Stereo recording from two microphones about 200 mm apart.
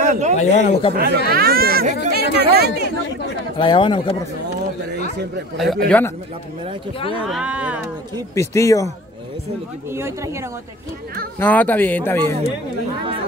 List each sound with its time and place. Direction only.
0.0 s a sound: 35° right (ahead or behind)
0.4 s a man's voice: 35° left (ahead or behind)
0.9 s speech: 50° right (ahead or behind)
3.5 s speech: 25° left (ahead or behind)
5.6 s speech: centre (ahead or behind)
7.2 s speech: 5° right (ahead or behind)
8.1 s speech: 15° left (ahead or behind)
9.8 s speech: 15° right (ahead or behind)
11.3 s speech: 10° left (ahead or behind)